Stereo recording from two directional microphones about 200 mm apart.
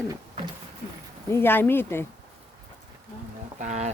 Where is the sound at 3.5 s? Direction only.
35° right (ahead or behind).